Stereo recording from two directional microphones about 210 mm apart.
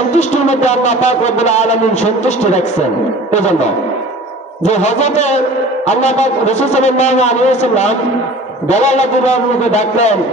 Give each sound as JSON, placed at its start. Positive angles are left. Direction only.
{"t": 0.1, "sound": "a man's voice", "side_deg": 35}